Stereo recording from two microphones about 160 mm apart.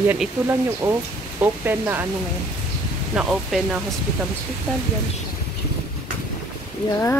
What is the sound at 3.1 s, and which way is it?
Speech, 5° right (ahead or behind).